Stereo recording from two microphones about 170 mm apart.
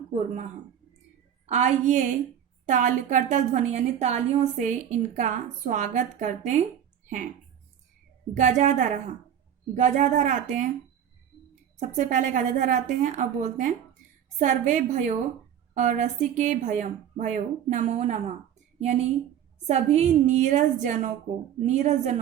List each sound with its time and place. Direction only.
0.1 s a woman's voice: 45° right (ahead or behind)
1.5 s a woman's voice: 40° right (ahead or behind)
8.4 s a woman's voice: 45° right (ahead or behind)
11.8 s a woman's voice: 45° right (ahead or behind)